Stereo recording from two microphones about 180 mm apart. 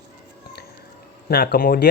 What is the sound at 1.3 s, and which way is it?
Speech, 55° left (ahead or behind).